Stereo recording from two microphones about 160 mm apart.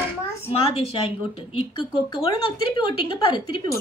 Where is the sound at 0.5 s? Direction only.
35° left (ahead or behind).